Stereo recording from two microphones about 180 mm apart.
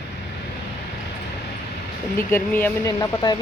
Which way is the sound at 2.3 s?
10° left (ahead or behind).